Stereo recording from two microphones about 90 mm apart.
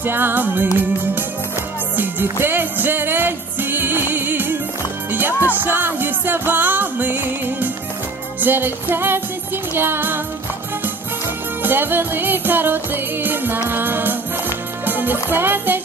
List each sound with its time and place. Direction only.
0.0 s music: 25° right (ahead or behind)
2.0 s music: 20° right (ahead or behind)
11.6 s music: 20° right (ahead or behind)